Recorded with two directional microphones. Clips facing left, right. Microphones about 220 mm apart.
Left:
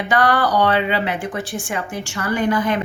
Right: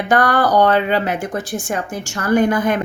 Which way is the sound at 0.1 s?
45° right (ahead or behind).